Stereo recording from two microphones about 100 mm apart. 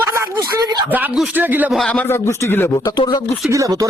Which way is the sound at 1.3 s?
20° right (ahead or behind).